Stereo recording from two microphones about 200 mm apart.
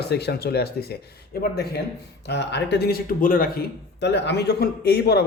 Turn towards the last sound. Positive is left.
turn(degrees=55)  # may be behind; listen again after turning